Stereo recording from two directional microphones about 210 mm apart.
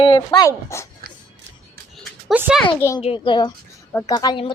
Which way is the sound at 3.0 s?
25° left (ahead or behind).